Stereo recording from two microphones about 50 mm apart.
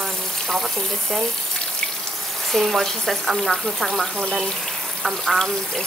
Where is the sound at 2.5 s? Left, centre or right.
Centre.